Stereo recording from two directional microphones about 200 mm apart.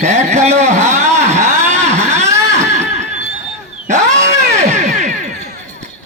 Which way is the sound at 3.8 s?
35° right (ahead or behind).